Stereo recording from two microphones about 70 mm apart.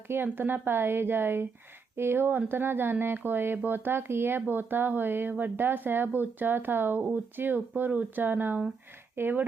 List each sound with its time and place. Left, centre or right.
0.3 s a woman's voice: right